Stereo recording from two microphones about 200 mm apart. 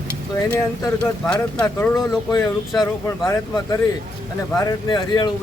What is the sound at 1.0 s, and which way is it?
Speech, 5° left (ahead or behind).